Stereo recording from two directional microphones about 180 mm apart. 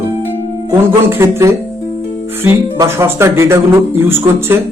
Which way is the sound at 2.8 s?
15° right (ahead or behind).